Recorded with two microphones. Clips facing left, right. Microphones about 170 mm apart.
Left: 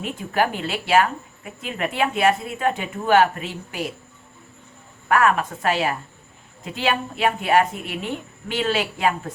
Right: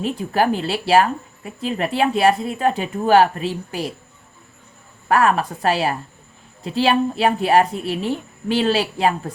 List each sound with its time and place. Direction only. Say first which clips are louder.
0.0 s a woman's voice: right 3 dB; 35° right (ahead or behind)
5.0 s a woman's voice: right 2 dB; 35° right (ahead or behind)